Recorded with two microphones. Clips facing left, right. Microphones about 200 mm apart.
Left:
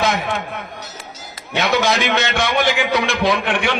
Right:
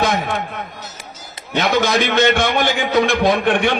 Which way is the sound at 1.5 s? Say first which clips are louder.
Right 1 dB; 50° right (ahead or behind).